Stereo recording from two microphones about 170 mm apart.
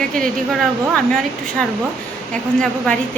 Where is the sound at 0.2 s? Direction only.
5° left (ahead or behind).